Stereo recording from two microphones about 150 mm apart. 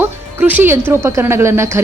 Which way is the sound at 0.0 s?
10° right (ahead or behind).